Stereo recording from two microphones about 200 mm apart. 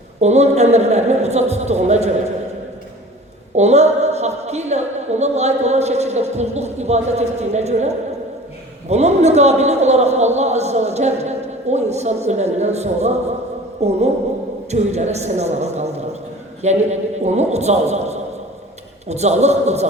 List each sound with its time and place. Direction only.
0.2 s a woman's voice: 35° right (ahead or behind)
3.5 s a woman's voice: 35° right (ahead or behind)